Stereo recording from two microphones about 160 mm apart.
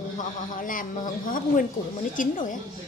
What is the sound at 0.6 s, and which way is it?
Speech, 60° left (ahead or behind).